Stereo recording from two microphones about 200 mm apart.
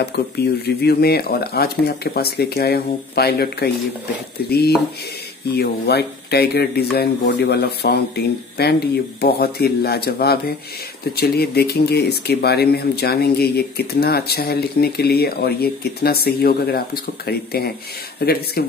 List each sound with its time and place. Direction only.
0.7 s speech: 55° left (ahead or behind)